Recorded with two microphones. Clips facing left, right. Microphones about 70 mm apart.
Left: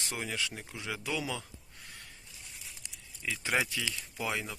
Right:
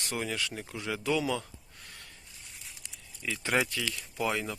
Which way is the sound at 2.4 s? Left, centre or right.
Centre.